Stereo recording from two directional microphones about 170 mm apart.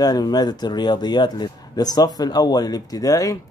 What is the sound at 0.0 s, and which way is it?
Speech, 25° left (ahead or behind).